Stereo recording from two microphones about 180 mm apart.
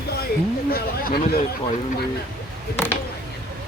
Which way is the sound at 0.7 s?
55° left (ahead or behind).